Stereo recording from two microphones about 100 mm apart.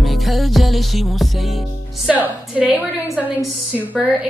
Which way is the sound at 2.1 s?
15° right (ahead or behind).